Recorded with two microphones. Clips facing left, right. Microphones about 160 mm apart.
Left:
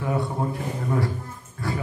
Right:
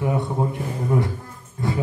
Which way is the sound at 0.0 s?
20° right (ahead or behind).